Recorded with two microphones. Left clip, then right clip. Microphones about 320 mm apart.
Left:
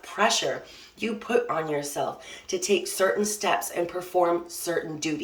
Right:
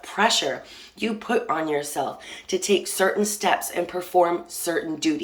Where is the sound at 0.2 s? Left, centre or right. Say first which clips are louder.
Right 3 dB; centre.